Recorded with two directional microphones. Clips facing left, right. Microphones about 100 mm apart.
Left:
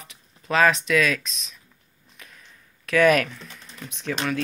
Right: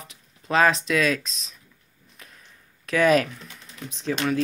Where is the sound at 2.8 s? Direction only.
25° right (ahead or behind).